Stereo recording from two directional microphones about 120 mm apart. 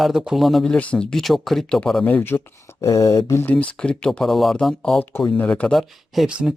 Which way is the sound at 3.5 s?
10° left (ahead or behind).